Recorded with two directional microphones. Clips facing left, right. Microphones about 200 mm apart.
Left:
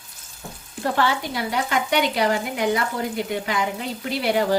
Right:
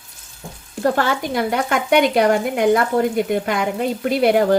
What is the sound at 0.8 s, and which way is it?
Speech, 45° right (ahead or behind).